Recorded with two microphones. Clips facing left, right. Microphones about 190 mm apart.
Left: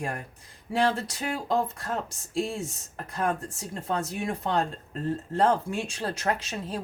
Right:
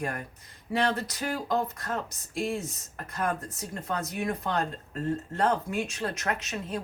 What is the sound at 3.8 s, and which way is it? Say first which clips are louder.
Speech: left 1 dB; 30° left (ahead or behind).